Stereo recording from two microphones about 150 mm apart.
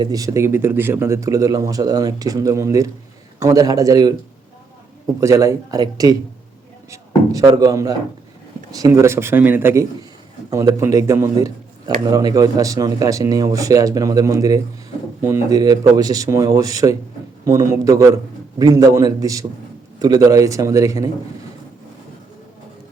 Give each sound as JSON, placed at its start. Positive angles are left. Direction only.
{"t": 0.0, "sound": "speech", "side_deg": -25}
{"t": 5.2, "sound": "speech", "side_deg": -20}
{"t": 7.3, "sound": "speech", "side_deg": -25}